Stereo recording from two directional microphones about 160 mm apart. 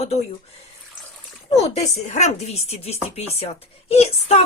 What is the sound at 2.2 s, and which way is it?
Speech, 45° left (ahead or behind).